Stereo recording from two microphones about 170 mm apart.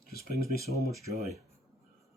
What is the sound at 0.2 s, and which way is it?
Speech, 65° left (ahead or behind).